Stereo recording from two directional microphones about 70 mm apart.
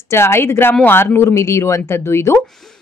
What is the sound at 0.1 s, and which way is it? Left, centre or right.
A woman's voice, left.